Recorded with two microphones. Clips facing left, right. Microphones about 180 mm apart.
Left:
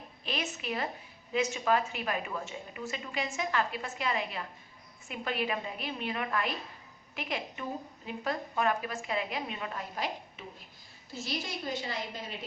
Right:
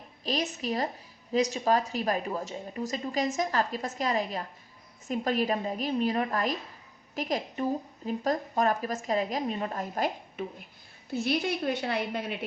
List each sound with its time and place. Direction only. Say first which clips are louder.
0.3 s a woman's voice: right 5 dB; 35° right (ahead or behind)
11.1 s a woman's voice: right 9 dB; 60° right (ahead or behind)